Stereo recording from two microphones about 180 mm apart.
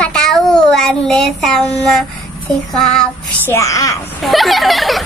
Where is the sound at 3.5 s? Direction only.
20° left (ahead or behind).